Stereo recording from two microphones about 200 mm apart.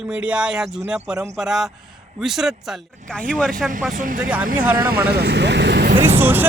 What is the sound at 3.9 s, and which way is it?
Speech, 40° right (ahead or behind).